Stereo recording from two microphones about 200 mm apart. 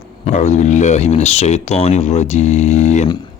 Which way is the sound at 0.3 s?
35° left (ahead or behind).